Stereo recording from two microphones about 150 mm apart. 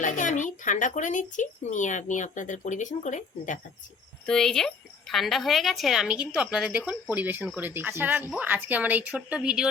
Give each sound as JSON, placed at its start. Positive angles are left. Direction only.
{"t": 0.0, "sound": "speech", "side_deg": 55}
{"t": 4.3, "sound": "a woman's voice", "side_deg": 5}